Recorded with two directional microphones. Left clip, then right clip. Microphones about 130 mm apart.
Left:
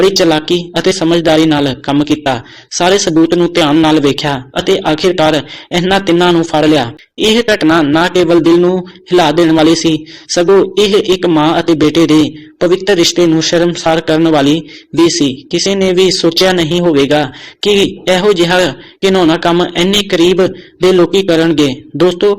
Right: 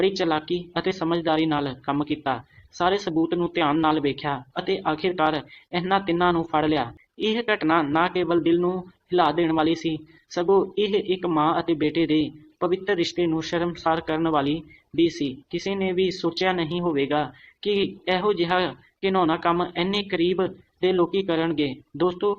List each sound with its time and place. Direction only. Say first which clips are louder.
0.0 s a man's voice: left 14 dB; 25° left (ahead or behind)